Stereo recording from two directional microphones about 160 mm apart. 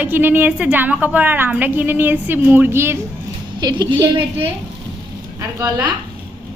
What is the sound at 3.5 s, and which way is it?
Speech, 25° right (ahead or behind).